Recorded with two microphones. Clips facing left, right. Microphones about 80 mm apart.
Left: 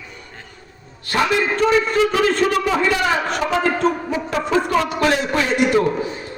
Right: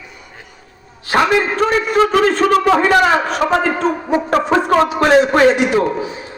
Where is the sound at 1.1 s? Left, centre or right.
Right.